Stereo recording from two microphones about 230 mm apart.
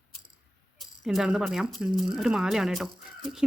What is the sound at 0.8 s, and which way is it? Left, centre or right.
Speech, centre.